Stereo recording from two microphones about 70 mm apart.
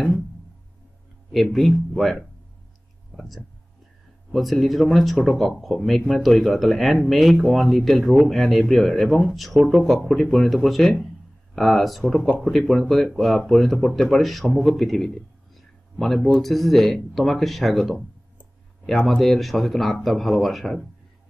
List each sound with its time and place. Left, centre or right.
1.3 s speech: centre
15.5 s a sound: centre
16.3 s speech: centre